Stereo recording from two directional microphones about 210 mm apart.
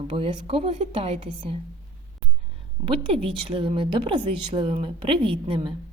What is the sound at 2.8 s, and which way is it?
A woman's voice, 25° right (ahead or behind).